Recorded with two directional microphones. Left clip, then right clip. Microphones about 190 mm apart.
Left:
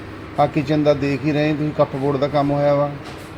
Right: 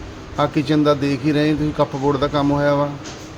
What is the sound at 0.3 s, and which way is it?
Speech, 15° right (ahead or behind).